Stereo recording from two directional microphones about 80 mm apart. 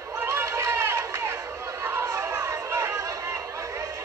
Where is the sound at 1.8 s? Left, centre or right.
Right.